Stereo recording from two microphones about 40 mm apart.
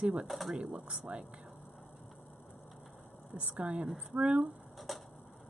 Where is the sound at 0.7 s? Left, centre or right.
Right.